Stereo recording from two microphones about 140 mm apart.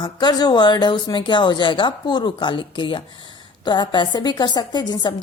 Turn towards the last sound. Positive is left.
turn(degrees=30)  # may be behind; listen again after turning